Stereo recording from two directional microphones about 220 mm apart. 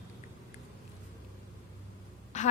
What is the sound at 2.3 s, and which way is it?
Quack, 35° left (ahead or behind).